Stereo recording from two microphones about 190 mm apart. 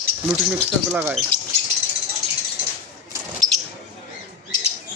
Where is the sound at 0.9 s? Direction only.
10° right (ahead or behind).